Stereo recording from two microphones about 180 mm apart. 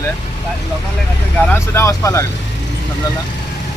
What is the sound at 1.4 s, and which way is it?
Speech, 15° left (ahead or behind).